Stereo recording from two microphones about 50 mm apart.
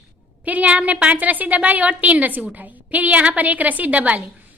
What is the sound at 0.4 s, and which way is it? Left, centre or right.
A woman's voice, right.